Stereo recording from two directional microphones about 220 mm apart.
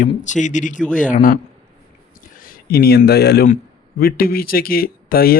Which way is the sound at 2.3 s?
40° left (ahead or behind).